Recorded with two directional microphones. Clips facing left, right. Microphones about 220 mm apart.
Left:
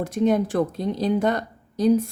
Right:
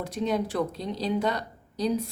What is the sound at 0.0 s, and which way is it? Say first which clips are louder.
Speech: left 7 dB; 50° left (ahead or behind).